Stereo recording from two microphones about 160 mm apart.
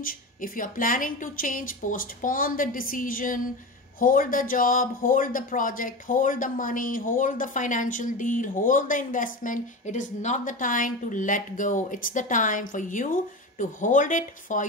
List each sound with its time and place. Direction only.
0.0 s speech: 60° left (ahead or behind)